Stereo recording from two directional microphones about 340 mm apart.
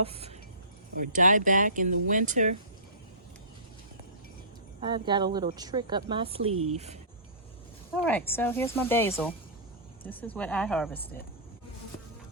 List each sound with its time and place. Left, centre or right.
0.0 s speech: centre
4.8 s speech: centre
7.9 s speech: centre